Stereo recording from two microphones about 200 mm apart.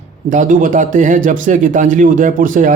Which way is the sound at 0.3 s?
40° right (ahead or behind).